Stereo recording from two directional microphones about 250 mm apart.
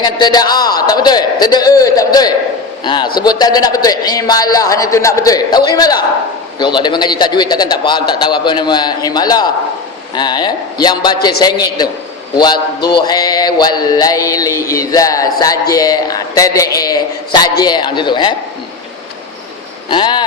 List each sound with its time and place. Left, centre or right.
0.0 s a man's voice: centre
16.7 s a sound: centre
17.6 s a man's voice: centre
19.9 s speech: centre